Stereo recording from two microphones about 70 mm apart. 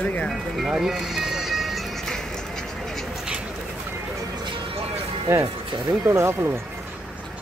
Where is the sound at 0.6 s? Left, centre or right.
Centre.